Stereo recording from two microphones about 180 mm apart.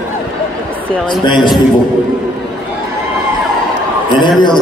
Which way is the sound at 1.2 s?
25° left (ahead or behind).